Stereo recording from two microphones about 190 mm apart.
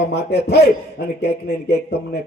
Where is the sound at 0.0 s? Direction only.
60° left (ahead or behind).